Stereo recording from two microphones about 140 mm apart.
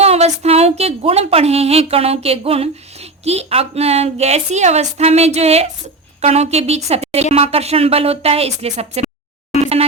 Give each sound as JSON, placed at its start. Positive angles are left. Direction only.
{"t": 0.0, "sound": "a woman's voice", "side_deg": -50}